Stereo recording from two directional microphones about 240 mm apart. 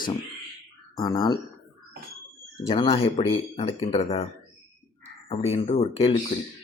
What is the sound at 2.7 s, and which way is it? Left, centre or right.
Speech, left.